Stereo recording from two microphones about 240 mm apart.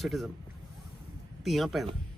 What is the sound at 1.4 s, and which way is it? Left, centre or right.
Speech, centre.